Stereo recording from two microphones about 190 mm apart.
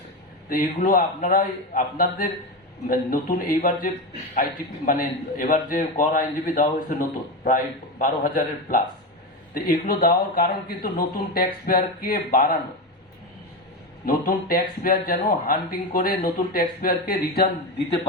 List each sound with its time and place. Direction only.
0.5 s speech: 45° left (ahead or behind)
5.4 s speech: 45° left (ahead or behind)
14.0 s speech: 50° left (ahead or behind)